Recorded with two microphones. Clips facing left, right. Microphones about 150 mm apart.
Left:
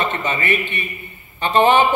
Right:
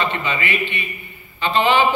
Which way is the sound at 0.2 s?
45° left (ahead or behind).